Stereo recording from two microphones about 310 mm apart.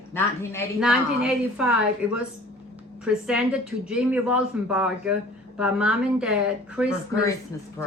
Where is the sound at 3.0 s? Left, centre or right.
Centre.